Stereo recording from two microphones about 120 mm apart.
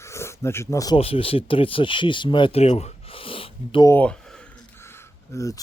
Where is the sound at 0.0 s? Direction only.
25° left (ahead or behind).